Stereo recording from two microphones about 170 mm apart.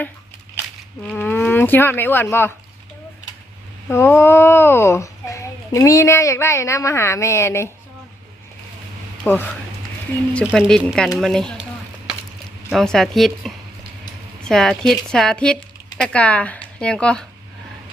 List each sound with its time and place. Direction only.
1.0 s speech: 10° left (ahead or behind)
3.8 s a child's voice: 15° left (ahead or behind)
9.2 s a child's voice: 10° left (ahead or behind)
10.5 s speech: 5° left (ahead or behind)
12.7 s a child's voice: 5° left (ahead or behind)